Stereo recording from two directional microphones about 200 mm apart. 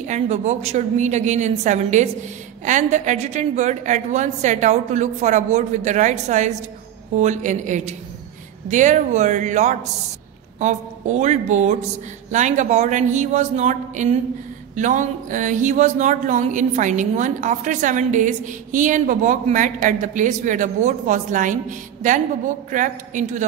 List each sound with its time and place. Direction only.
0.0 s speech: 35° right (ahead or behind)